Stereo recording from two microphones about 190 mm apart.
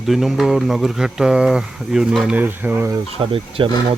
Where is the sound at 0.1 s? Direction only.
Centre (ahead or behind).